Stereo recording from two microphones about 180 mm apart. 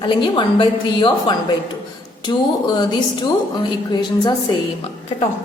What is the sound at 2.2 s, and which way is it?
Speech, 25° left (ahead or behind).